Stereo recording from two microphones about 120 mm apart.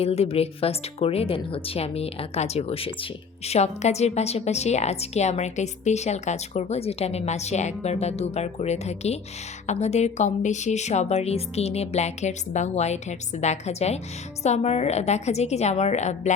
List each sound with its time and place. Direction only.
0.0 s a woman's voice: 55° left (ahead or behind); by 16.3 s 75° left (ahead or behind)